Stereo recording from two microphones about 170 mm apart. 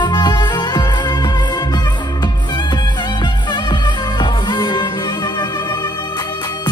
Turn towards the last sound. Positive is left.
turn(degrees=25)  # may be behind; listen again after turning